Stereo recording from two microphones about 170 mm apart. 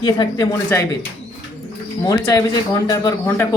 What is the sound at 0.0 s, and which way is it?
Speech, 30° left (ahead or behind).